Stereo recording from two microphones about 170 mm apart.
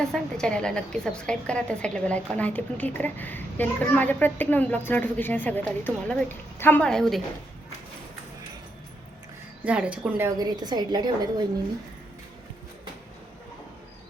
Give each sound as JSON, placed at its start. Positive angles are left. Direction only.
{"t": 0.0, "sound": "a woman's voice", "side_deg": 5}
{"t": 9.6, "sound": "speech", "side_deg": -5}
{"t": 10.2, "sound": "a woman's voice", "side_deg": -25}